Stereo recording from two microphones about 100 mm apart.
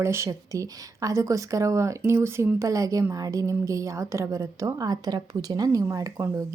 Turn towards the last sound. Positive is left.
turn(degrees=-30)  # may be behind; listen again after turning